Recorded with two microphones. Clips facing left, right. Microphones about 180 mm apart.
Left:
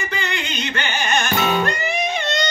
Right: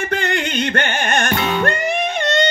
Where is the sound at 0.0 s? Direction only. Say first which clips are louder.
Right 6 dB; 55° right (ahead or behind).